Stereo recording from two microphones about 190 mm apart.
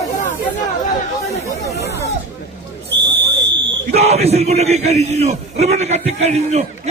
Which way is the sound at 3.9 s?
35° right (ahead or behind).